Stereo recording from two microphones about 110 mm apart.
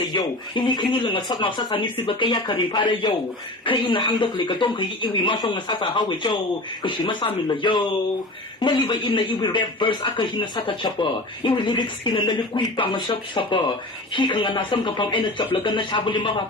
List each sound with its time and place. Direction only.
0.1 s speech: 45° left (ahead or behind)